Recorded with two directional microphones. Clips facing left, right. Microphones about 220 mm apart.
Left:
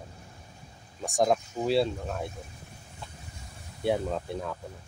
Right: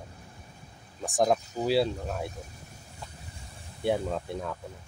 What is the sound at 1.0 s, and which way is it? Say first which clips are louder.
Speech: even; centre (ahead or behind).